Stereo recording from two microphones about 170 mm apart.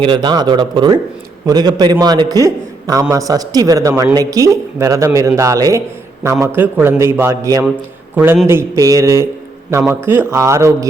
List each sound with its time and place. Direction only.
0.0 s a man's voice: 30° right (ahead or behind)